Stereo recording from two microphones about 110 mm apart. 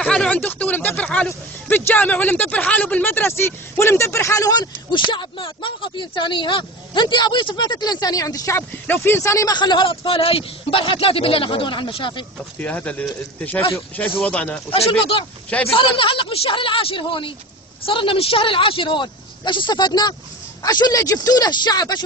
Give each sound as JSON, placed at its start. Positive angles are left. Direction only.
{"t": 0.0, "sound": "speech", "side_deg": 10}
{"t": 9.5, "sound": "a man's voice", "side_deg": 45}
{"t": 12.5, "sound": "speech", "side_deg": 15}
{"t": 14.7, "sound": "a man's voice", "side_deg": 55}